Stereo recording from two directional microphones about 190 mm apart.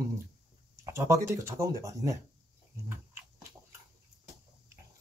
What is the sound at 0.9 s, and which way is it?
Speech, 15° right (ahead or behind).